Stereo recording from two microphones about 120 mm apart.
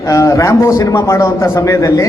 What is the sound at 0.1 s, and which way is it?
A man's voice, 30° left (ahead or behind).